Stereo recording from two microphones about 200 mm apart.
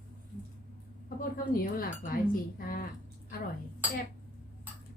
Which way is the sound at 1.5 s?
45° left (ahead or behind).